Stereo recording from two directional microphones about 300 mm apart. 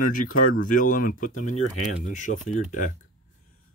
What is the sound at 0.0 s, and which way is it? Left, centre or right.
Speech, left.